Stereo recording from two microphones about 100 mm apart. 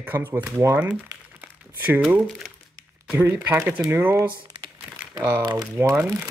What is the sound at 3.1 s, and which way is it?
Speech, 20° right (ahead or behind).